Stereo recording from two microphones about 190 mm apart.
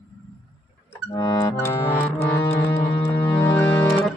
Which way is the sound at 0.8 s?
20° left (ahead or behind).